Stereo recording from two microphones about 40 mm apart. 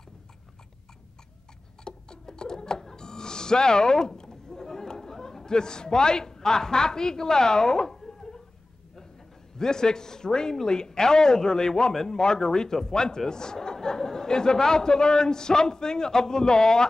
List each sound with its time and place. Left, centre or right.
1.9 s alarm clock: centre
4.2 s chatter: centre
9.6 s a man's voice: centre